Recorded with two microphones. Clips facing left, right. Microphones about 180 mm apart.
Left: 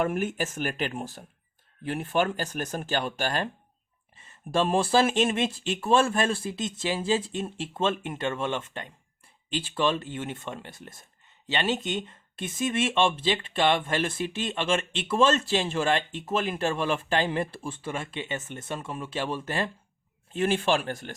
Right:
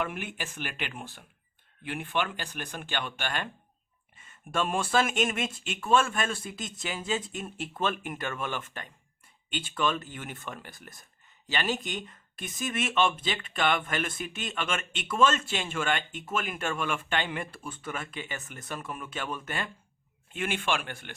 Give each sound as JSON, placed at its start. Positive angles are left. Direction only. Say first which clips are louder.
{"t": 0.0, "sound": "speech", "louder": "left 7 dB", "side_deg": 45}